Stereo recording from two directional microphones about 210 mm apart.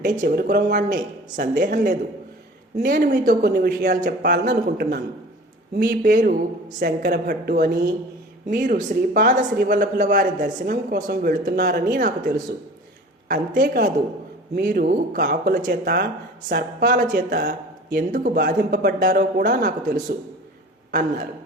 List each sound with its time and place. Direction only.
0.0 s speech: 45° right (ahead or behind)